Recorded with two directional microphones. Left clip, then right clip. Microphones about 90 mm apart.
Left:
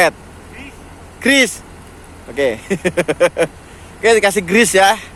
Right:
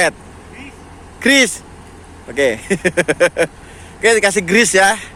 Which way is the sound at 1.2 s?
20° right (ahead or behind).